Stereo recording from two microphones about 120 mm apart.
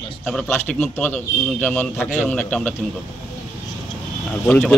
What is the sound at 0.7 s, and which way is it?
A man's voice, 15° left (ahead or behind).